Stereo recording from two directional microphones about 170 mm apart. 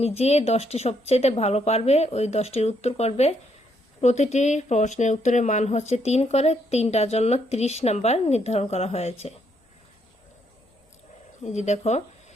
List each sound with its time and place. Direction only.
0.0 s speech: 40° left (ahead or behind)
11.4 s speech: 40° left (ahead or behind)